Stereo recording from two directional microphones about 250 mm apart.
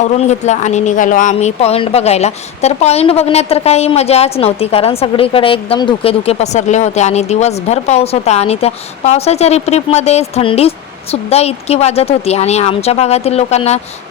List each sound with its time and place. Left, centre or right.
0.0 s speech: left